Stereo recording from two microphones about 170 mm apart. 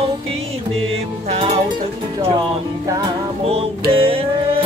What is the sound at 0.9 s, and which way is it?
Music, 35° right (ahead or behind).